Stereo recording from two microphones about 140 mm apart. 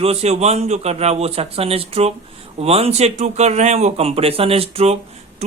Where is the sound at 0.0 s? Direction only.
50° right (ahead or behind).